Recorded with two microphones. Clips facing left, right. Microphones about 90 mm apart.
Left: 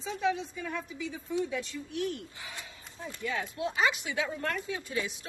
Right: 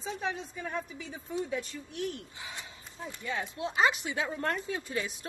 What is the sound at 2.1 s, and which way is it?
Speech, 20° right (ahead or behind).